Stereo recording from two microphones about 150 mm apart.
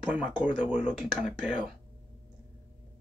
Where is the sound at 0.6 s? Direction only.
10° right (ahead or behind).